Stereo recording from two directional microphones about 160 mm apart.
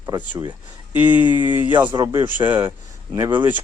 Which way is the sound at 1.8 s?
30° right (ahead or behind).